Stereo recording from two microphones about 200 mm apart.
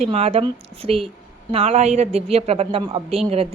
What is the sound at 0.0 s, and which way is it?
A woman's voice, 30° right (ahead or behind).